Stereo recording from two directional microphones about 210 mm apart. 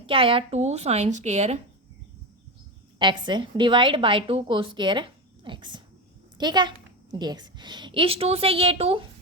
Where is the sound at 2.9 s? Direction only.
20° right (ahead or behind).